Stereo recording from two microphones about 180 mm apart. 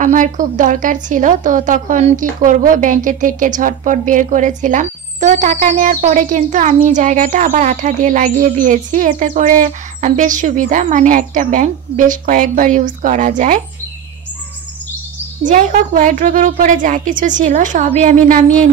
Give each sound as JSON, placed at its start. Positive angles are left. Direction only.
{"t": 0.0, "sound": "a woman's voice", "side_deg": -45}
{"t": 15.4, "sound": "a woman's voice", "side_deg": -45}